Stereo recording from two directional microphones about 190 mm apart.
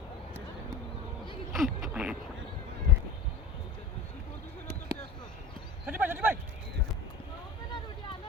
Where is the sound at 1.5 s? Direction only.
Centre (ahead or behind).